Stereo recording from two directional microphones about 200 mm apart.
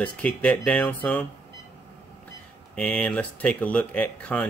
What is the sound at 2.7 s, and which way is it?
Speech, 5° left (ahead or behind).